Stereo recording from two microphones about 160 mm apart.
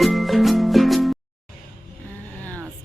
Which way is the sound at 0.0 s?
Centre (ahead or behind).